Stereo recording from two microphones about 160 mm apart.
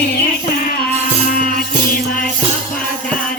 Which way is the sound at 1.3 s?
65° left (ahead or behind).